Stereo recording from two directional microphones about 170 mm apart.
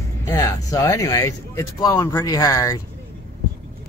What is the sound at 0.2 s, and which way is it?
Speech, 15° left (ahead or behind).